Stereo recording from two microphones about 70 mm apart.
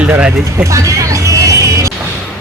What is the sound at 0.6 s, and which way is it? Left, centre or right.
Music, right.